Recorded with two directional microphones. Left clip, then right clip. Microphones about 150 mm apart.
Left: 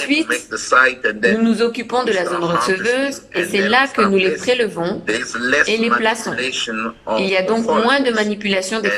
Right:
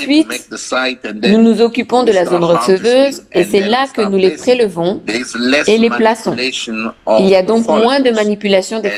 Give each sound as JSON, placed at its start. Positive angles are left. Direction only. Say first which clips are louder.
{"t": 0.1, "sound": "speech", "louder": "right 7 dB", "side_deg": -30}